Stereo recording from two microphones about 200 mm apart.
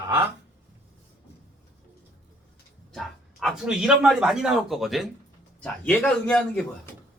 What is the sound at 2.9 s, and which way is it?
A man's voice, centre (ahead or behind).